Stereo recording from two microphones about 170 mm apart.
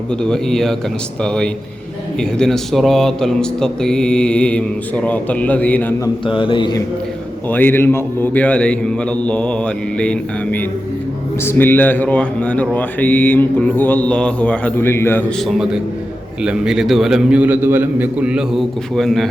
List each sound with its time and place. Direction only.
0.1 s a man's voice: 5° left (ahead or behind)
6.2 s speech: 30° left (ahead or behind)
7.5 s speech: 10° left (ahead or behind)
15.4 s a man's voice: centre (ahead or behind)